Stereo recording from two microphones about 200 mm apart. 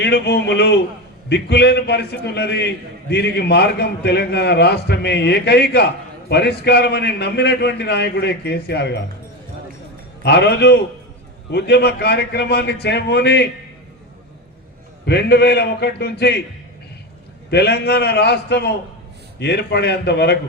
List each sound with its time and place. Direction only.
0.0 s a man's voice: 55° left (ahead or behind)
10.2 s a man's voice: 55° left (ahead or behind)
15.0 s a man's voice: 55° left (ahead or behind)
17.5 s a man's voice: 55° left (ahead or behind)